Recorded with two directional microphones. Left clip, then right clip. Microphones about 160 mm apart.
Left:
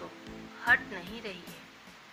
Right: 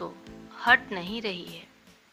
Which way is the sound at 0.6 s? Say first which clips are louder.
Right 5 dB; 75° right (ahead or behind).